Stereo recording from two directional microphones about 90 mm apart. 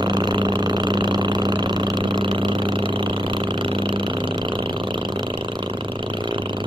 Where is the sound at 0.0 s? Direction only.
55° right (ahead or behind).